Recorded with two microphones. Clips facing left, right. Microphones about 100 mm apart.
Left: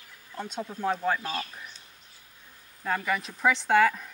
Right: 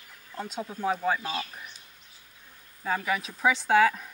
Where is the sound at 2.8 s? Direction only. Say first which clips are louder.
Even; 5° right (ahead or behind).